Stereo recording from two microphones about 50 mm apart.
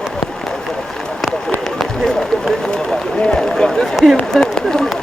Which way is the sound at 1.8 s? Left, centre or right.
Centre.